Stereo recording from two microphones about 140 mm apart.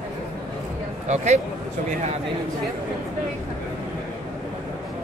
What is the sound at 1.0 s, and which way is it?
Speech, 55° right (ahead or behind).